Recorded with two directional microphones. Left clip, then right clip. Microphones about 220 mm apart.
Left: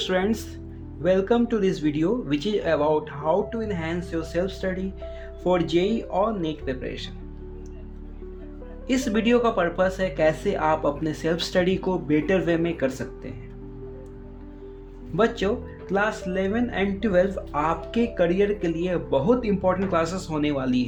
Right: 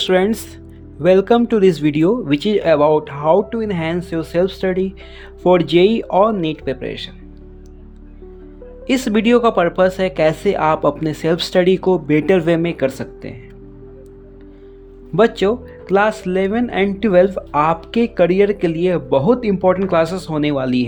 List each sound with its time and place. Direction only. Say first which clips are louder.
0.0 s speech: right 9 dB; 30° right (ahead or behind)
8.9 s speech: right 7 dB; 35° right (ahead or behind)
15.1 s speech: right 8 dB; 35° right (ahead or behind)